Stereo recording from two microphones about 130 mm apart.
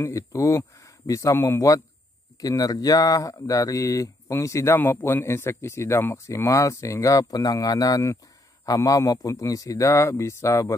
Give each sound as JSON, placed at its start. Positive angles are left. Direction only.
{"t": 0.0, "sound": "speech", "side_deg": 25}